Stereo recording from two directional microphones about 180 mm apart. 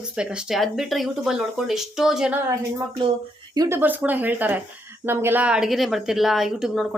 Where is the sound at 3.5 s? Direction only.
20° right (ahead or behind).